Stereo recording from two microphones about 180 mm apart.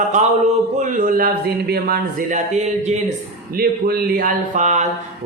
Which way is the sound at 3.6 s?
55° right (ahead or behind).